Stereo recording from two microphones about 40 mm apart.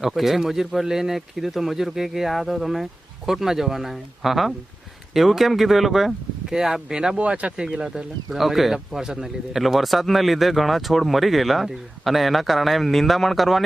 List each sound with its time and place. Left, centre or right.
0.0 s speech: centre
7.2 s speech: right
7.6 s speech: centre
8.3 s speech: centre